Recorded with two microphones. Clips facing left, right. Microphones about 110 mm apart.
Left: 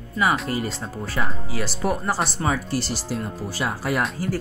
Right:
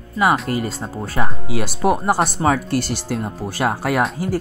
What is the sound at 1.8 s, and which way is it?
Speech, 30° right (ahead or behind).